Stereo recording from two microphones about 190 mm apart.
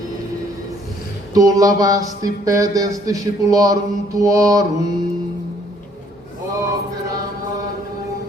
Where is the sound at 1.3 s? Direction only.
20° right (ahead or behind).